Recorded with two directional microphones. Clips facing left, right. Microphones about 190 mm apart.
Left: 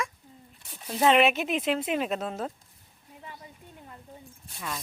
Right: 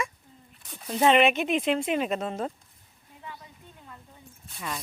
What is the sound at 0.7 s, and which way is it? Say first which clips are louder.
Speech: right 1 dB; centre (ahead or behind).